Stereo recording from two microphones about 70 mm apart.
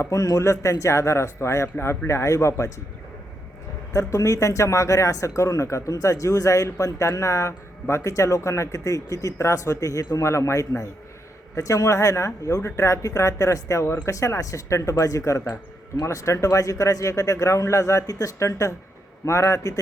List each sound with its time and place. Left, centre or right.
0.0 s a man's voice: left
3.9 s a man's voice: left
18.3 s a man's voice: left